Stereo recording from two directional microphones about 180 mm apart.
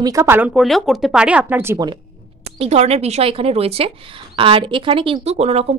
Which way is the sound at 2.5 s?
35° right (ahead or behind).